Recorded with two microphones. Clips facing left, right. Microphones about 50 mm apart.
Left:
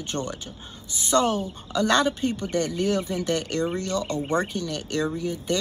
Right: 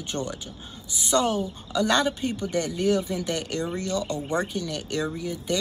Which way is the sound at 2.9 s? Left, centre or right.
Left.